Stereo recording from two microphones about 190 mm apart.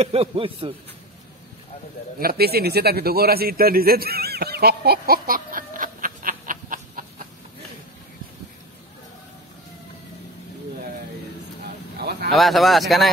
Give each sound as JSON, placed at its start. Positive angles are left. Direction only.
{"t": 0.0, "sound": "a man's voice", "side_deg": -30}
{"t": 2.1, "sound": "speech", "side_deg": -55}
{"t": 12.0, "sound": "speech", "side_deg": -55}
{"t": 12.3, "sound": "speech", "side_deg": 0}